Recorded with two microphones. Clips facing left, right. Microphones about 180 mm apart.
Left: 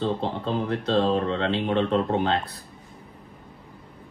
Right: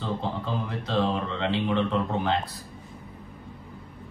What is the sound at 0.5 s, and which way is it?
Speech, 65° left (ahead or behind).